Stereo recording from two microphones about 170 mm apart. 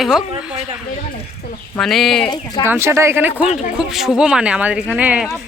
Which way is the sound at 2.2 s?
25° left (ahead or behind).